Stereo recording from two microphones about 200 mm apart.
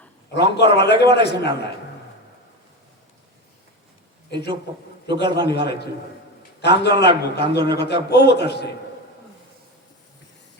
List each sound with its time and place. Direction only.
0.3 s a man's voice: 55° left (ahead or behind)
5.0 s a man's voice: 60° left (ahead or behind)